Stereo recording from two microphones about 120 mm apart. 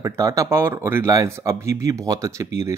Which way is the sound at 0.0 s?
25° right (ahead or behind).